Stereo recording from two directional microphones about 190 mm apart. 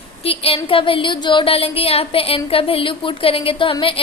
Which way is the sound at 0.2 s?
30° left (ahead or behind).